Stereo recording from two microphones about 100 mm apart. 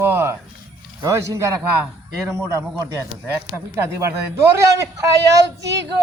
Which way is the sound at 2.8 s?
30° right (ahead or behind).